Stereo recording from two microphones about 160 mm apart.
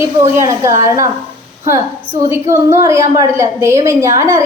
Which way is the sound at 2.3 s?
15° right (ahead or behind).